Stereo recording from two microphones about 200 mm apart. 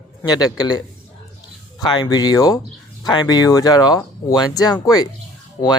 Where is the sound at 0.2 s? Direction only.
20° left (ahead or behind).